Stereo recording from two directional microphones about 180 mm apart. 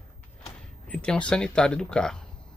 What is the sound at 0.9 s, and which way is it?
Speech, 5° left (ahead or behind).